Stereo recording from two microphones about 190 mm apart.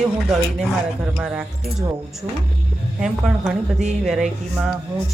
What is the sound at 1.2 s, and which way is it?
Speech, 5° right (ahead or behind).